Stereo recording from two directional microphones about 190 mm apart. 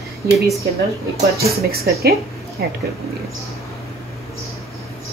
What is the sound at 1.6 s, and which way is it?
Speech, 55° right (ahead or behind).